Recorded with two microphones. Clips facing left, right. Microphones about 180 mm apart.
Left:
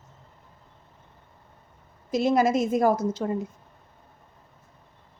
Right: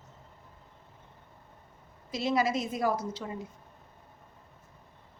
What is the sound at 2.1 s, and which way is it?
A woman's voice, 50° left (ahead or behind).